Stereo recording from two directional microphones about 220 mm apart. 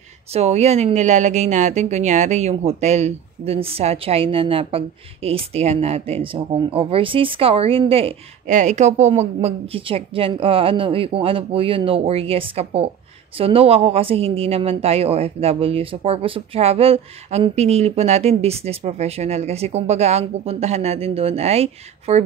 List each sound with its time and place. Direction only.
0.3 s speech: 30° right (ahead or behind)